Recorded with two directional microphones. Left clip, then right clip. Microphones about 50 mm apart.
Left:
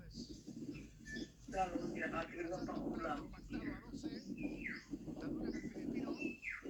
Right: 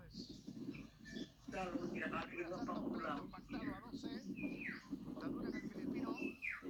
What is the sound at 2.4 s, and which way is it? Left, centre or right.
Bird, left.